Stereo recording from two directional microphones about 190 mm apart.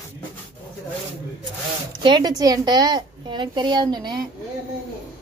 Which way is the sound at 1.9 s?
25° right (ahead or behind).